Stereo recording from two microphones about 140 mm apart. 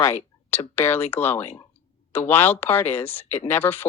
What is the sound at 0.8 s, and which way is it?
Speech, 20° left (ahead or behind).